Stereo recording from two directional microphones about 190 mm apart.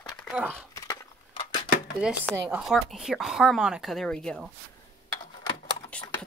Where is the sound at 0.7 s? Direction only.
25° left (ahead or behind).